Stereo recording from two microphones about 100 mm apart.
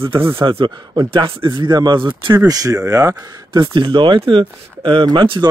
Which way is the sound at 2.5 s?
35° right (ahead or behind).